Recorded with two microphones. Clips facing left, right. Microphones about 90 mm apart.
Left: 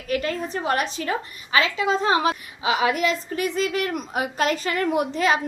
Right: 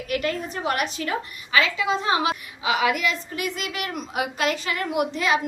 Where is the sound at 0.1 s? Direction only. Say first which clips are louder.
Left 2 dB; 30° left (ahead or behind).